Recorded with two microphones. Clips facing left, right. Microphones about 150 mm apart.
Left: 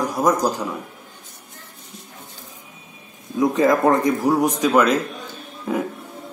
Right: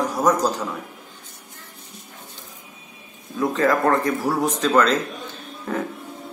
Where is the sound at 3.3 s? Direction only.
15° left (ahead or behind).